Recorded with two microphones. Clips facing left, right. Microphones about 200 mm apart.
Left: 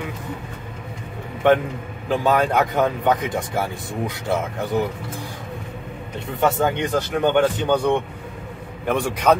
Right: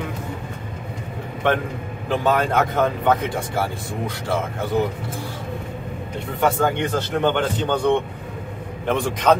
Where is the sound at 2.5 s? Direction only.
15° left (ahead or behind).